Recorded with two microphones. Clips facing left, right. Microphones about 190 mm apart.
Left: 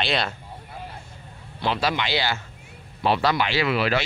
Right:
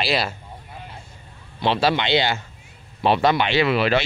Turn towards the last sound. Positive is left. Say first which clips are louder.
# right 4 dB
turn(degrees=-25)  # may be behind; listen again after turning